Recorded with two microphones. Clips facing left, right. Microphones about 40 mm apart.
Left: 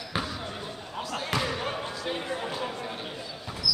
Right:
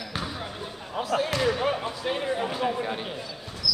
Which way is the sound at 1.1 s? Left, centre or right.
Centre.